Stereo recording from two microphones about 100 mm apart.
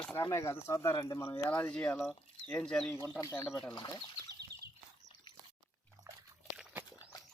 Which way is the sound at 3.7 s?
45° left (ahead or behind).